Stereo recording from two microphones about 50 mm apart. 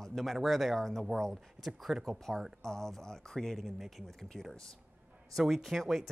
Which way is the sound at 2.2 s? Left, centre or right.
Centre.